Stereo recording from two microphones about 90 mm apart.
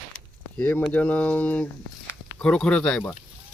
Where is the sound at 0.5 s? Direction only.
15° left (ahead or behind).